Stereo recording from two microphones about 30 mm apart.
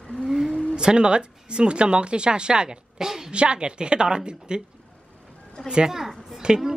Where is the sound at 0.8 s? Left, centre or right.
Right.